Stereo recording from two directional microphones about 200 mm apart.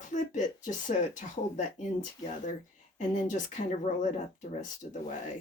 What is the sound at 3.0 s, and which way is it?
Speech, 40° left (ahead or behind).